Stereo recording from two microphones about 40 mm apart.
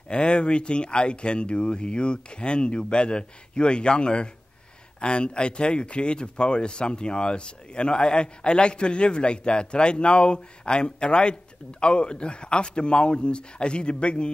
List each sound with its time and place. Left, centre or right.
0.1 s speech: left